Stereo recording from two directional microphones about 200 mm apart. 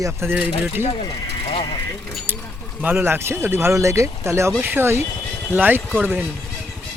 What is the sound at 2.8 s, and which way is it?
Speech, 10° right (ahead or behind).